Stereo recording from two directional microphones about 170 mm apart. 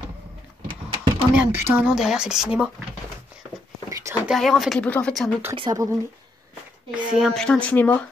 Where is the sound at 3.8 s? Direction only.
15° right (ahead or behind).